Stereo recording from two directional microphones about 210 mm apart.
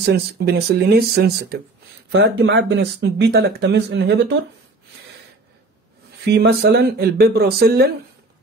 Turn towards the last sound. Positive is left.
turn(degrees=-50)  # may be behind; listen again after turning